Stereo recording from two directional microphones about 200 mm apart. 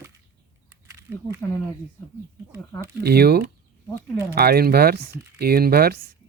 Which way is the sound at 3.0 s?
50° right (ahead or behind).